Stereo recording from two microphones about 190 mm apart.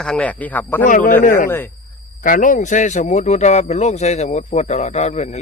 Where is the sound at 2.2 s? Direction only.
45° left (ahead or behind).